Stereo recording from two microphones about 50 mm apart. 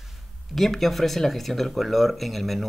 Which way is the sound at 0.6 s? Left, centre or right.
Centre.